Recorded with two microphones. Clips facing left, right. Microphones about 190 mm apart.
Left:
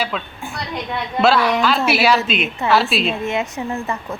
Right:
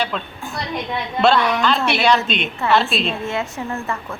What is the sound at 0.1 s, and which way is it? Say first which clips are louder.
A woman's voice: even; centre (ahead or behind).